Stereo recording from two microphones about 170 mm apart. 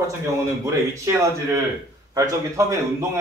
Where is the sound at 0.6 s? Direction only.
20° right (ahead or behind).